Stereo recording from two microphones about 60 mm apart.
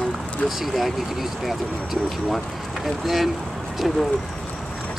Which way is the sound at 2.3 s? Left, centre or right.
Centre.